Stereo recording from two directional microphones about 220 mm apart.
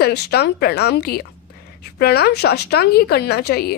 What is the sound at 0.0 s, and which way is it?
A woman's voice, 45° left (ahead or behind).